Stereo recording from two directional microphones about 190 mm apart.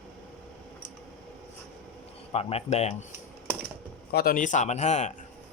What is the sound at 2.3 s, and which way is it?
Speech, 30° left (ahead or behind).